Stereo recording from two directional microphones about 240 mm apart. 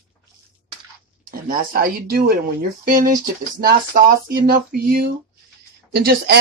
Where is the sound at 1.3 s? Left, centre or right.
Right.